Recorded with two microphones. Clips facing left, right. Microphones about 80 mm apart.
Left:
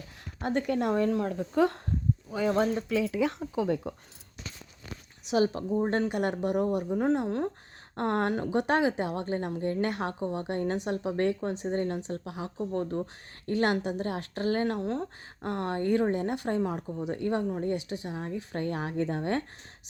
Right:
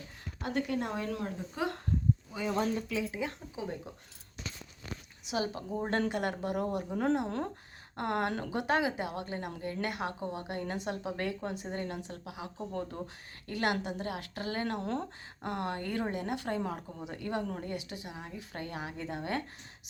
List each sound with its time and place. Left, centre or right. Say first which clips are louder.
0.3 s speech: left 5 dB; left
5.3 s a woman's voice: left 8 dB; left
6.0 s a woman's voice: left 4 dB; left
7.9 s a woman's voice: left 4 dB; left
13.5 s a woman's voice: left 5 dB; left; by 17.1 s centre
17.1 s a woman's voice: left 6 dB; left